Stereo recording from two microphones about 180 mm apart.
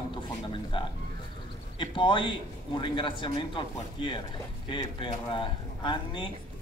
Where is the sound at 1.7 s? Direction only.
25° left (ahead or behind).